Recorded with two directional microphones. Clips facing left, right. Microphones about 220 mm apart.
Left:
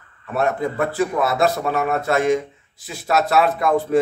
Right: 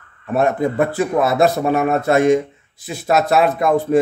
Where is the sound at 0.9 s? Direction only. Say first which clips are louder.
Right 4 dB; 20° right (ahead or behind).